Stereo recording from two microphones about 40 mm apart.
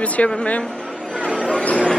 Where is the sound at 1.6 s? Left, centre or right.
Left.